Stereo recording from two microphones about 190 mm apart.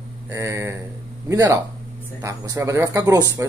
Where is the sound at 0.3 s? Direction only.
15° right (ahead or behind).